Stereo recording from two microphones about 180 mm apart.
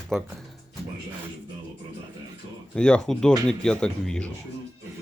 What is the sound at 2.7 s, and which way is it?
Speech, 5° left (ahead or behind).